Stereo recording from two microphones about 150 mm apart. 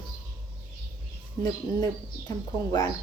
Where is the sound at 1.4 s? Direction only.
20° left (ahead or behind).